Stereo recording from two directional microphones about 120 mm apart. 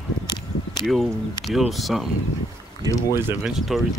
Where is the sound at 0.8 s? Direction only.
Centre (ahead or behind).